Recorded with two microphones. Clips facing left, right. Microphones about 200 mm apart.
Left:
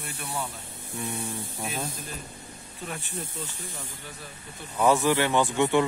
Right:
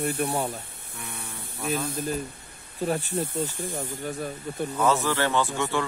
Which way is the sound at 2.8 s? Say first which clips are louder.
Right 11 dB; 40° right (ahead or behind).